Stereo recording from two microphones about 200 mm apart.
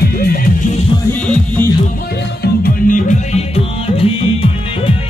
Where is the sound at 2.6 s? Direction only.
40° left (ahead or behind).